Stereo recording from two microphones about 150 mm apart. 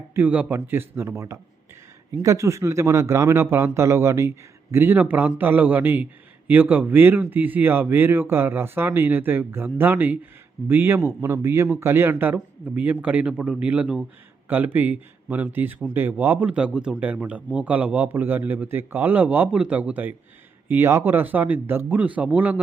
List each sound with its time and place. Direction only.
0.1 s a man's voice: 10° right (ahead or behind)